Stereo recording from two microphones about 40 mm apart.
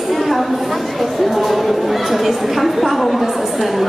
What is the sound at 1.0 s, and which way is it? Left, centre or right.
A woman's voice, centre.